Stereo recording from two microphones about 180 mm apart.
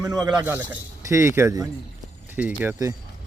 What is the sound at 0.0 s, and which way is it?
Speech, 20° right (ahead or behind).